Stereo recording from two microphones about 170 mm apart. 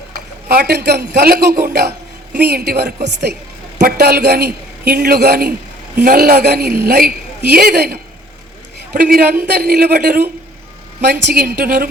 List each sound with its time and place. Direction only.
0.1 s a man's voice: 65° right (ahead or behind)
2.3 s a woman's voice: 75° right (ahead or behind)
3.8 s a man's voice: 60° right (ahead or behind)